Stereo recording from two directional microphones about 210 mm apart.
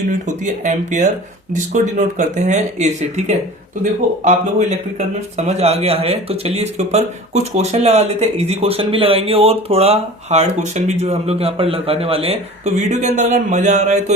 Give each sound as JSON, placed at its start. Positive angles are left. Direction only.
{"t": 0.1, "sound": "a man's voice", "side_deg": -35}